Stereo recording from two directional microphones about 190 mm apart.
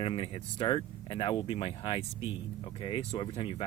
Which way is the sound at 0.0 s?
30° left (ahead or behind).